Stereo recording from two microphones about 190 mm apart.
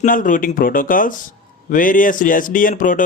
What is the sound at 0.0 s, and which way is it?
Speech, 45° left (ahead or behind).